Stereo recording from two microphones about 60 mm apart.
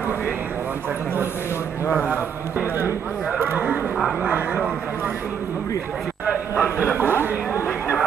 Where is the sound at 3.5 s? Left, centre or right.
Right.